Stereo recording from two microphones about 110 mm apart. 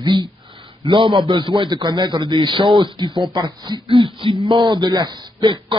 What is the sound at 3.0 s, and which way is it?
Speech, 45° right (ahead or behind).